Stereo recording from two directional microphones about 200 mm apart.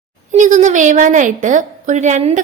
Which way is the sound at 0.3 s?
40° right (ahead or behind).